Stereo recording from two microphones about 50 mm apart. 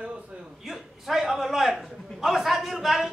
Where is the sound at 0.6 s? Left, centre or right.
Centre.